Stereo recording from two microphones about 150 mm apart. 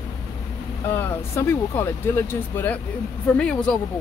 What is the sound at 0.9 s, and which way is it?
Speech, 15° left (ahead or behind).